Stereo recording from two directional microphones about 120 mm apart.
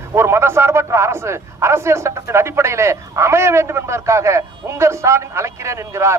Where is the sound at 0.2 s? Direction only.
20° right (ahead or behind).